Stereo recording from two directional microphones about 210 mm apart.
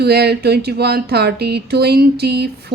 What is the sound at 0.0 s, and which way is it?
Speech, 50° right (ahead or behind).